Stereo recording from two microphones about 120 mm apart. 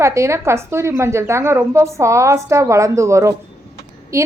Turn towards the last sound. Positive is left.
turn(degrees=-25)  # may be behind; listen again after turning